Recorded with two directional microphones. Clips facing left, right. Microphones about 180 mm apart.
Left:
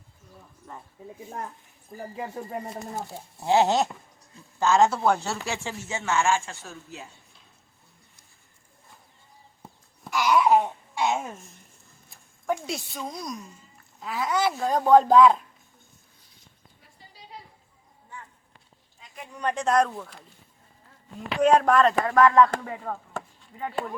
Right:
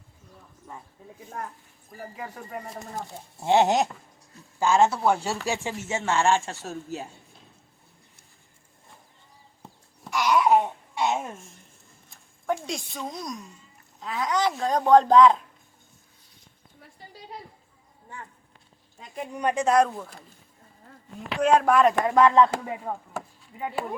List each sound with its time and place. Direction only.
0.7 s speech: 10° right (ahead or behind)
2.1 s speech: 25° left (ahead or behind)
3.4 s speech: 20° right (ahead or behind); by 7.1 s 40° right (ahead or behind)
9.6 s babbling: centre (ahead or behind)
12.6 s speech: centre (ahead or behind)
19.1 s speech: 25° right (ahead or behind)
19.4 s speech: 10° right (ahead or behind)
22.0 s speech: 20° right (ahead or behind)